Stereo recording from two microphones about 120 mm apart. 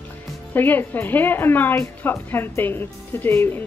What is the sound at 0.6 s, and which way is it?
A woman's voice, 15° left (ahead or behind).